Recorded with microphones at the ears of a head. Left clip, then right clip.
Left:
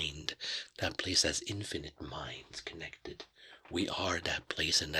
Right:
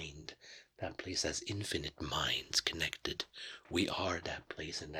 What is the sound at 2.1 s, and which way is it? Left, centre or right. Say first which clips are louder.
Speech: right 11 dB; right.